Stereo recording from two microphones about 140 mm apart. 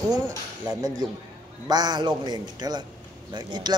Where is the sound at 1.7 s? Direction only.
30° right (ahead or behind).